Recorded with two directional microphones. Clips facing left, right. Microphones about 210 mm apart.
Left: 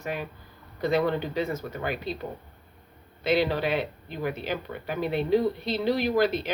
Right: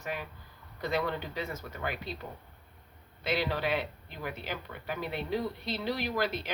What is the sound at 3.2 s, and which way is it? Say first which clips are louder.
Speech: left 6 dB; 20° left (ahead or behind).